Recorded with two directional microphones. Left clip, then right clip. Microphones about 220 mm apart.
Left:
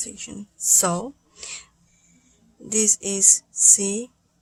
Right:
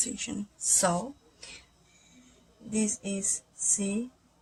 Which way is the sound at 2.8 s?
30° left (ahead or behind).